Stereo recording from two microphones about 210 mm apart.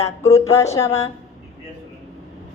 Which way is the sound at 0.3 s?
15° left (ahead or behind).